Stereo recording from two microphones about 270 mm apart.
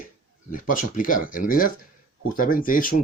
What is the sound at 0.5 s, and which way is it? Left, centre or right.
Speech, left.